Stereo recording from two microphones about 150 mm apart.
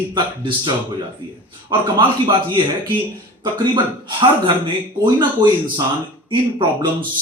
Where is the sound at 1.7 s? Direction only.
30° right (ahead or behind).